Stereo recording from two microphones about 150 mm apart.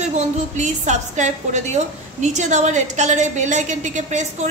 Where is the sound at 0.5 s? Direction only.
55° right (ahead or behind).